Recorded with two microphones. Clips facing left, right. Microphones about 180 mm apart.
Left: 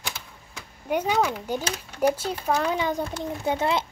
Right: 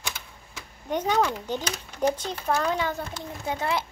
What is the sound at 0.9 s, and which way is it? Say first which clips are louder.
Speech: left 1 dB; 10° left (ahead or behind).